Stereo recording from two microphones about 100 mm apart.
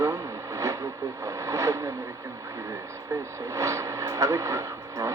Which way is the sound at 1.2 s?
30° right (ahead or behind).